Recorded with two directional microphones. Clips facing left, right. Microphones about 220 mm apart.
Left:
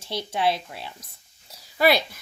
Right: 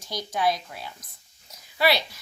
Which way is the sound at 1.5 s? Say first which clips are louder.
Left 3 dB; 35° left (ahead or behind).